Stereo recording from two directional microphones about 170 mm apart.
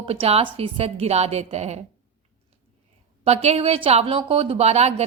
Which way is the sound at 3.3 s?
35° right (ahead or behind).